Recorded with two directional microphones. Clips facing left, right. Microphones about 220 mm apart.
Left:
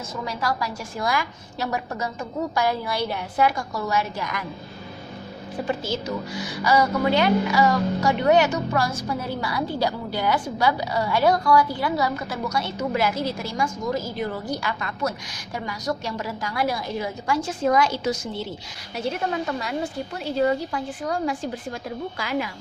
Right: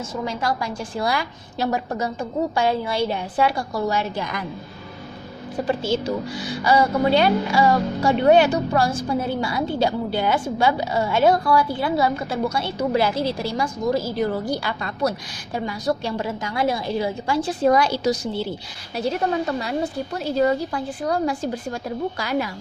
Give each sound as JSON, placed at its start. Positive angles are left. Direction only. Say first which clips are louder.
{"t": 0.3, "sound": "a woman's voice", "louder": "even", "side_deg": -25}
{"t": 5.6, "sound": "a woman's voice", "louder": "right 5 dB", "side_deg": -30}